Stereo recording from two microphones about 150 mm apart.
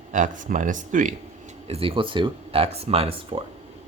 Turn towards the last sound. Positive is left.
turn(degrees=-40)  # may be behind; listen again after turning